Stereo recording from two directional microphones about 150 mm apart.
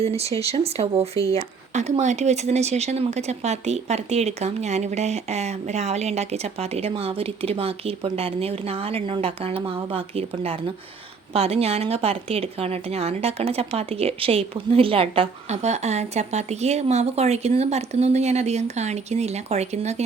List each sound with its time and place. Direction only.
0.0 s speech: 40° right (ahead or behind)